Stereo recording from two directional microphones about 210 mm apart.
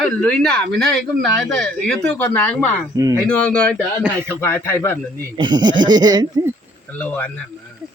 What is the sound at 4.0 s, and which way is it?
Speech, 10° right (ahead or behind).